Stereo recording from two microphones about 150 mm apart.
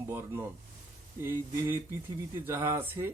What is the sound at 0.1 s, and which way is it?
Speech, 15° right (ahead or behind).